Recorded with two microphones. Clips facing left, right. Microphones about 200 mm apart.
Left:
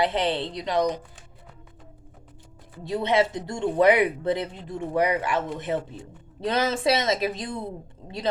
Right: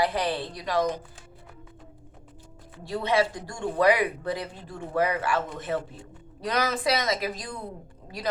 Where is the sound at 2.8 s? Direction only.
20° left (ahead or behind).